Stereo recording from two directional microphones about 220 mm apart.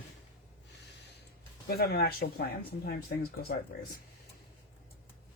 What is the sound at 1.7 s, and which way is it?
Speech, 45° left (ahead or behind).